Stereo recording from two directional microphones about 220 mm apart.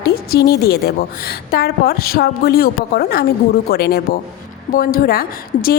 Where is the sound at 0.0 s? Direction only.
45° left (ahead or behind).